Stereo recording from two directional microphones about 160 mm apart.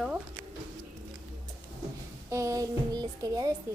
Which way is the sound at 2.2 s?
20° right (ahead or behind).